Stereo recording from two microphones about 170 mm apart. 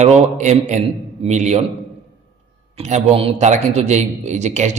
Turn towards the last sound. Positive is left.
turn(degrees=-45)  # may be behind; listen again after turning